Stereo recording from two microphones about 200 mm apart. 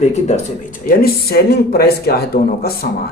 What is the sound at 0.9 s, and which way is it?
Speech, 45° left (ahead or behind).